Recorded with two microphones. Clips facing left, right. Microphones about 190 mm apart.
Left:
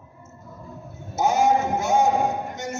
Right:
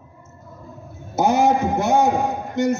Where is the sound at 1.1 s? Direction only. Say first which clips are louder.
Right 3 dB; 60° right (ahead or behind).